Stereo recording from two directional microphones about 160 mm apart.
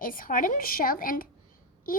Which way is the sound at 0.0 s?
60° left (ahead or behind).